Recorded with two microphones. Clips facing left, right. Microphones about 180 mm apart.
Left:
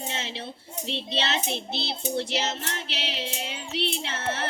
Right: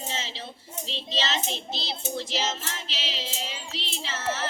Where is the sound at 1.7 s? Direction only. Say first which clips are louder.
Left 3 dB; 65° left (ahead or behind).